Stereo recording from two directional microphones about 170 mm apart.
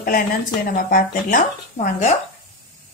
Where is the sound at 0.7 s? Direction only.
55° left (ahead or behind).